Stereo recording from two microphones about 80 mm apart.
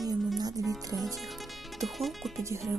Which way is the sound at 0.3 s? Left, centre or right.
Right.